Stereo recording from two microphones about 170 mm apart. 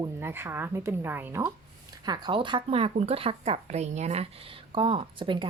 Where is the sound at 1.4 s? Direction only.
25° right (ahead or behind).